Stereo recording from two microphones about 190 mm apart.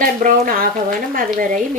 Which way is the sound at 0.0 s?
45° right (ahead or behind).